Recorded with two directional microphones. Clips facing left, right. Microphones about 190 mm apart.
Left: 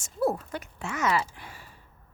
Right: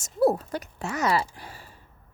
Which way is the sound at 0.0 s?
35° right (ahead or behind).